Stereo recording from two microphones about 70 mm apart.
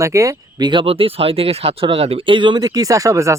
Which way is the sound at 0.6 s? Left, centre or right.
Right.